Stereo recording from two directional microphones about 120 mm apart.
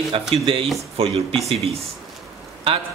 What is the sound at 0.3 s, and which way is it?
Speech, 50° right (ahead or behind).